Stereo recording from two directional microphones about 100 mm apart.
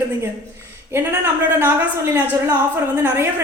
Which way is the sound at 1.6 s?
20° right (ahead or behind).